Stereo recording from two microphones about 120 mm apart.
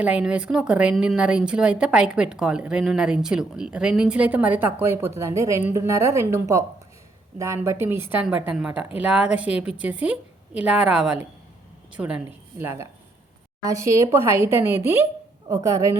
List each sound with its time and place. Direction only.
0.0 s a woman's voice: 10° right (ahead or behind)
12.5 s speech: 20° right (ahead or behind)